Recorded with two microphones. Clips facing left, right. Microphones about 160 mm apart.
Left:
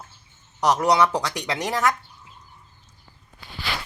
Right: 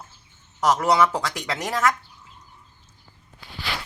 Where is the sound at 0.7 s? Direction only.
15° left (ahead or behind).